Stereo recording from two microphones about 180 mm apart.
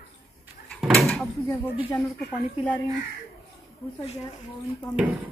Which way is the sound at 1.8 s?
15° left (ahead or behind).